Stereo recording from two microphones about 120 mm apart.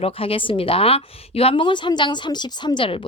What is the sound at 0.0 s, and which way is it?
Speech, 50° left (ahead or behind).